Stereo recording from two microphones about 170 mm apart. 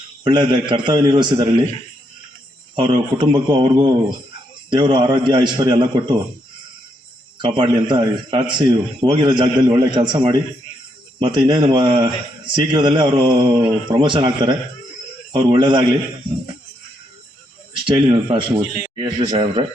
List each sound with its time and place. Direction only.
0.3 s a man's voice: 25° right (ahead or behind)
2.7 s a man's voice: 30° right (ahead or behind)
7.4 s a man's voice: 30° right (ahead or behind)
17.8 s a man's voice: 30° right (ahead or behind)